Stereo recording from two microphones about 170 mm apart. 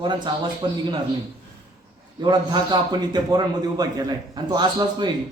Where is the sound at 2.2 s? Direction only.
25° right (ahead or behind).